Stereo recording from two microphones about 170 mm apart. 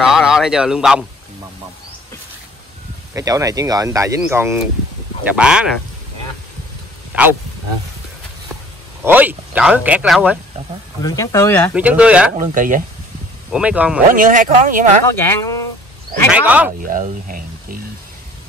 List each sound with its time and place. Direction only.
0.0 s a sound: 5° right (ahead or behind)
3.2 s speech: 20° right (ahead or behind)
9.0 s speech: 10° right (ahead or behind)
11.0 s speech: 20° left (ahead or behind)
11.7 s speech: 10° right (ahead or behind)
12.4 s speech: 50° right (ahead or behind)
13.5 s speech: 5° right (ahead or behind)
14.1 s speech: 50° right (ahead or behind)
15.1 s speech: 15° left (ahead or behind)
16.3 s speech: 10° right (ahead or behind)
16.8 s speech: 50° right (ahead or behind)